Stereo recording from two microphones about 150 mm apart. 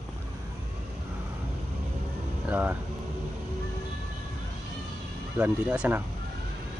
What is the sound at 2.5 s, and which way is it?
Speech, 10° right (ahead or behind).